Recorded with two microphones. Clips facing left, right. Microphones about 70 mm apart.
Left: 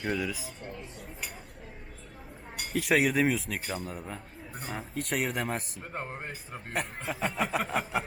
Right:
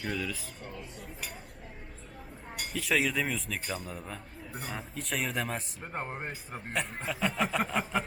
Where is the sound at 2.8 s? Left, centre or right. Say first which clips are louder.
Left 3 dB; centre.